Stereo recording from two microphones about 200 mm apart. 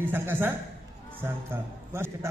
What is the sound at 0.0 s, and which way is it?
A man's voice, 10° right (ahead or behind).